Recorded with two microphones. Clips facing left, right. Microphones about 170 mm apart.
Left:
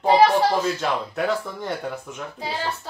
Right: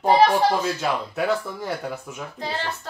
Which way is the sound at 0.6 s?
5° right (ahead or behind).